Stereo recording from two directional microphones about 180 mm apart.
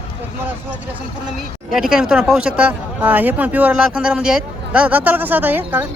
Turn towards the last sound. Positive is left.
turn(degrees=-10)  # may be behind; listen again after turning